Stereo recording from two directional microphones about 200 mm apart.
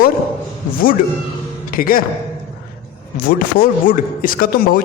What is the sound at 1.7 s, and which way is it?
Speech, 45° left (ahead or behind).